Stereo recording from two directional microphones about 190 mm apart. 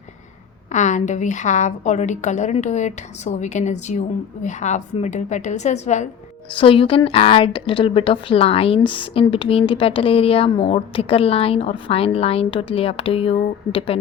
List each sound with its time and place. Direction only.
0.7 s a woman's voice: 40° left (ahead or behind)